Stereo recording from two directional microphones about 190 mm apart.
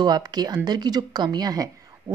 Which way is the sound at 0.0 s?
20° right (ahead or behind).